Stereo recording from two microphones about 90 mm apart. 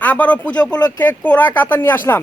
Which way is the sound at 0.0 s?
20° left (ahead or behind).